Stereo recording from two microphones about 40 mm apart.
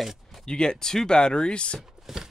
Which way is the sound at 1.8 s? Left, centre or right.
Centre.